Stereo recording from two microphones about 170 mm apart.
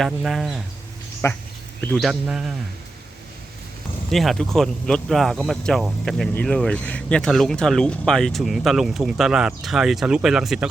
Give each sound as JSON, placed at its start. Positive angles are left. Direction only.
{"t": 0.0, "sound": "speech", "side_deg": 0}
{"t": 1.2, "sound": "speech", "side_deg": 15}
{"t": 1.8, "sound": "speech", "side_deg": 5}
{"t": 4.1, "sound": "speech", "side_deg": 0}